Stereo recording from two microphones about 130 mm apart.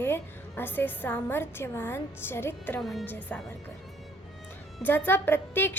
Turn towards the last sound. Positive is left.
turn(degrees=15)  # may be behind; listen again after turning